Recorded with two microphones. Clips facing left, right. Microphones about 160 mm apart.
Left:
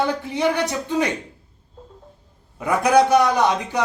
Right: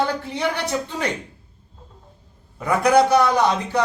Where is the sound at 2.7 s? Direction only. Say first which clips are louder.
Even; 20° left (ahead or behind).